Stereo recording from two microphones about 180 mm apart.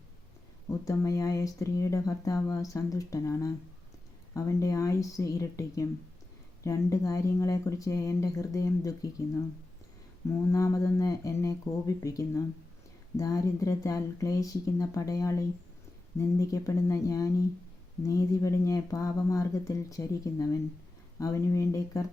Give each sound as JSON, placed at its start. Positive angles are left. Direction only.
{"t": 0.7, "sound": "speech", "side_deg": 20}
{"t": 10.5, "sound": "speech", "side_deg": 15}